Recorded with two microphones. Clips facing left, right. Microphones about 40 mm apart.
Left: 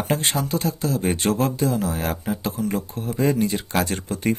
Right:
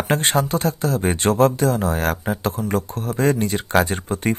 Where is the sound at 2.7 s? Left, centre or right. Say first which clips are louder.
Right 3 dB; right.